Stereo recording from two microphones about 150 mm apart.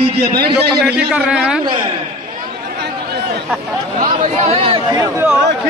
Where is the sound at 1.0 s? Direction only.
5° right (ahead or behind).